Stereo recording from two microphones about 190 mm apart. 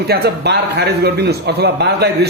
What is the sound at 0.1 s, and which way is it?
A man's voice, 55° right (ahead or behind).